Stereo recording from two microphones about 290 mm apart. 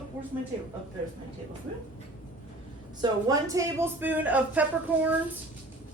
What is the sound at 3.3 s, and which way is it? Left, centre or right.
Speech, centre.